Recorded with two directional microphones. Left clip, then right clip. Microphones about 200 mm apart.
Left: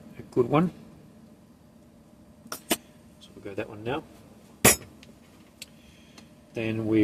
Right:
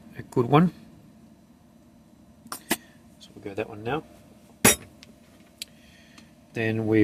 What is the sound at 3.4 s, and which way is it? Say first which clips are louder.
Speech: right 2 dB; 55° right (ahead or behind).